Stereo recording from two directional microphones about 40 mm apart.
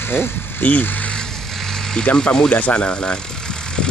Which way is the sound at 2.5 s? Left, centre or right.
Left.